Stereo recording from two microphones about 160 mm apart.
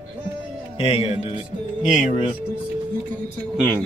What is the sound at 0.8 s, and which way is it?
Speech, 35° left (ahead or behind).